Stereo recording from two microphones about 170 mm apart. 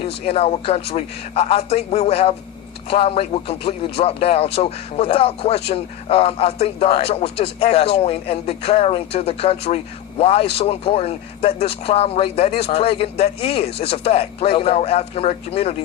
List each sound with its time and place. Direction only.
0.0 s a man's voice: 35° left (ahead or behind)